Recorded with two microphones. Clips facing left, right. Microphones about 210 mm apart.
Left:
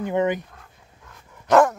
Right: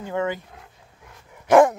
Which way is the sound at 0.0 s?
20° left (ahead or behind).